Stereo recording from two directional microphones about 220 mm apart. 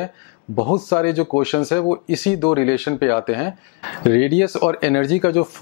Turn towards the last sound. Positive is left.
turn(degrees=20)  # may be behind; listen again after turning